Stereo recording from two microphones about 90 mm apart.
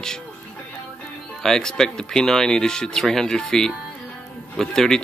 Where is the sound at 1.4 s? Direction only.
5° left (ahead or behind).